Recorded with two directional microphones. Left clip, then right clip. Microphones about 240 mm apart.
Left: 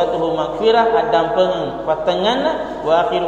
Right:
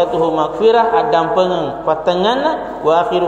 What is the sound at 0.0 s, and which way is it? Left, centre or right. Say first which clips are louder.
A man's voice: right 3 dB; right.